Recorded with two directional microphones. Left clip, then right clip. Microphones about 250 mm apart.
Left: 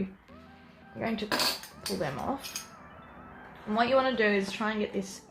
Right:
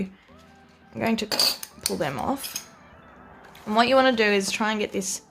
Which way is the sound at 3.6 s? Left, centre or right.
Right.